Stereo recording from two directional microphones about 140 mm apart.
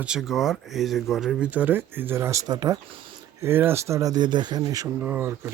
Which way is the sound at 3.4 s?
15° right (ahead or behind).